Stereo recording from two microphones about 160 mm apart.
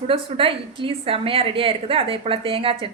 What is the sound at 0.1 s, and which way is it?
A woman's voice, 35° right (ahead or behind).